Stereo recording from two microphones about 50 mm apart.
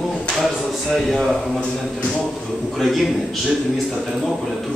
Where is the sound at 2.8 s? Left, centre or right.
Centre.